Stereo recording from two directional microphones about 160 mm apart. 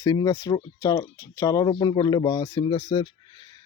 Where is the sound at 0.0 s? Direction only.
25° left (ahead or behind).